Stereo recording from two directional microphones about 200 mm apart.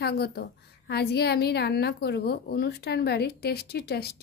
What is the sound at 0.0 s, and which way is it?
A woman's voice, 50° left (ahead or behind).